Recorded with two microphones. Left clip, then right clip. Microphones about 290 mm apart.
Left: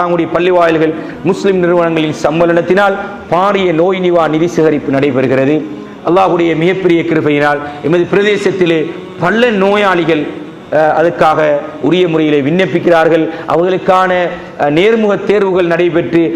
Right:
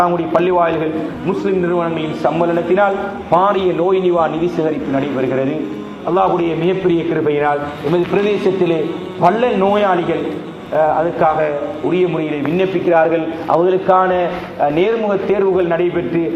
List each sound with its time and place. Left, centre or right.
0.0 s a man's voice: left